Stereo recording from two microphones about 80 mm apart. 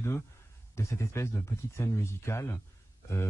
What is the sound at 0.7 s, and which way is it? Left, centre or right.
Speech, left.